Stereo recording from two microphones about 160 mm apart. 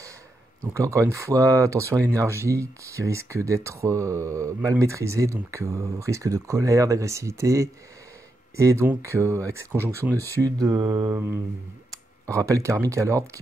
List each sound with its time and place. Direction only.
0.6 s speech: 20° right (ahead or behind)